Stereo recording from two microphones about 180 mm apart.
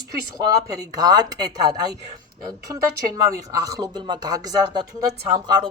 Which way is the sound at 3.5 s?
20° right (ahead or behind).